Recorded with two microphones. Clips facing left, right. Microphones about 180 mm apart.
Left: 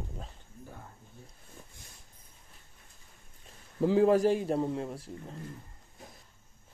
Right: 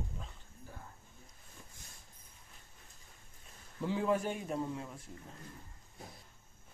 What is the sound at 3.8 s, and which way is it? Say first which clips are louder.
Speech: left 10 dB; 40° left (ahead or behind).